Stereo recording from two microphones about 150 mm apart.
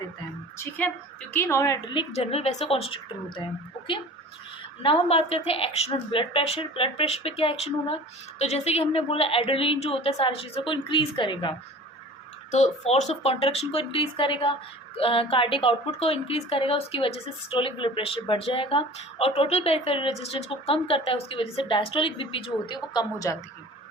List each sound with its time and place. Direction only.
1.3 s a woman's voice: 15° left (ahead or behind)
2.1 s a woman's voice: 45° left (ahead or behind)
4.8 s a woman's voice: 40° left (ahead or behind)
12.5 s a woman's voice: 50° left (ahead or behind); by 23.4 s 20° left (ahead or behind)